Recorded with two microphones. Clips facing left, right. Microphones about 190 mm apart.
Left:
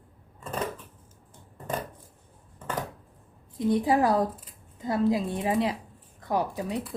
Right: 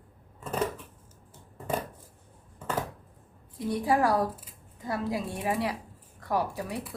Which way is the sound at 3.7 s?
20° left (ahead or behind).